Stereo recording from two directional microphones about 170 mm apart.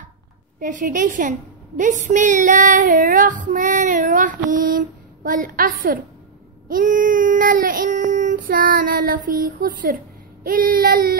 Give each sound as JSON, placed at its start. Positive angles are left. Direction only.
{"t": 0.6, "sound": "child singing", "side_deg": -50}